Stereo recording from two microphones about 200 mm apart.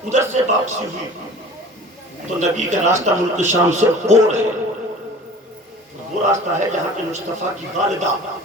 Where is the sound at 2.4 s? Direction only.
35° right (ahead or behind).